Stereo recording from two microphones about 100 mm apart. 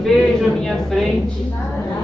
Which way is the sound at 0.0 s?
Centre (ahead or behind).